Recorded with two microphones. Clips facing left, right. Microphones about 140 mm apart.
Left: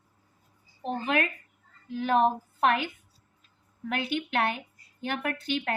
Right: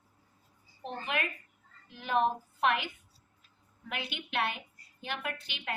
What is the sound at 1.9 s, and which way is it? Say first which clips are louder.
Speech: left 5 dB; 50° left (ahead or behind).